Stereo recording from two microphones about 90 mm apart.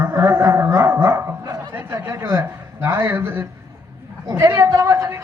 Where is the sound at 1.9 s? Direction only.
40° right (ahead or behind); by 3.4 s 25° right (ahead or behind).